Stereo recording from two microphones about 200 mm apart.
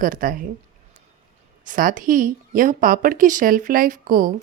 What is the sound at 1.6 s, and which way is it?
A woman's voice, 40° right (ahead or behind).